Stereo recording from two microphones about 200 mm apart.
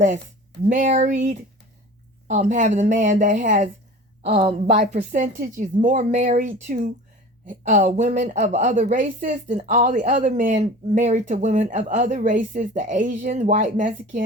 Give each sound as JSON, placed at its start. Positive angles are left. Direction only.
{"t": 0.6, "sound": "speech", "side_deg": -40}